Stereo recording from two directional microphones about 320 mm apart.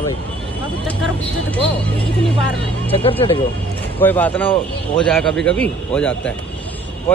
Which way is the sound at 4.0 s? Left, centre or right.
Centre.